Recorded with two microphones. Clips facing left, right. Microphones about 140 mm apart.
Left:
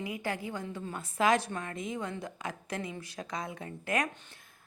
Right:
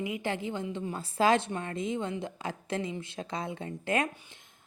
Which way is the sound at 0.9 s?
30° right (ahead or behind).